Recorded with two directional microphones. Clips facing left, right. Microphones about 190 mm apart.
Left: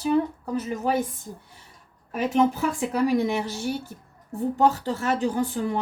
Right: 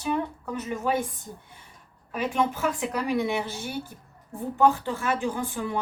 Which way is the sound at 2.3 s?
35° left (ahead or behind).